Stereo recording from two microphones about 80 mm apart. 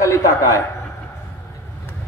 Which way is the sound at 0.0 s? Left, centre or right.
Left.